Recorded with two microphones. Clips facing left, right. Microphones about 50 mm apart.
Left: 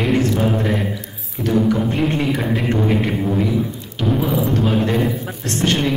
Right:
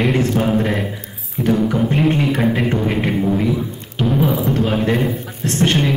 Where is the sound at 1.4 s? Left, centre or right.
Right.